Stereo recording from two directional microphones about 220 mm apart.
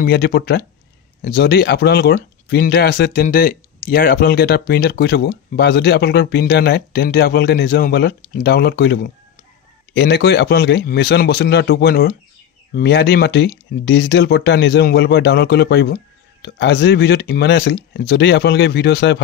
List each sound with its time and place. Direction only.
0.0 s speech: 45° left (ahead or behind)